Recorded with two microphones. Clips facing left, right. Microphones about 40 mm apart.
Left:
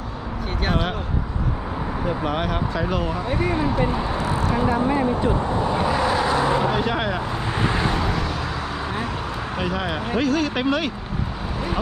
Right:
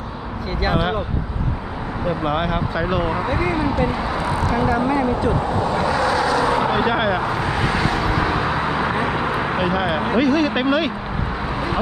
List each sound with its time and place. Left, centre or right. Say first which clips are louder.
0.6 s speech: right 4 dB; centre
2.0 s speech: right 4 dB; centre
5.6 s vehicle: right 2 dB; centre
6.7 s speech: right 4 dB; centre
8.1 s vehicle: right 6 dB; right
9.6 s speech: right 2 dB; centre